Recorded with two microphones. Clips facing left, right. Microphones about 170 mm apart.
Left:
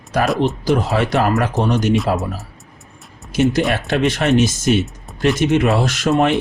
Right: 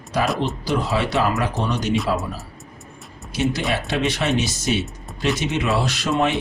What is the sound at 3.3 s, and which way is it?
Speech, 50° left (ahead or behind).